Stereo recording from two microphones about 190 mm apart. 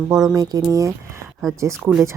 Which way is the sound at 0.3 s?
20° right (ahead or behind).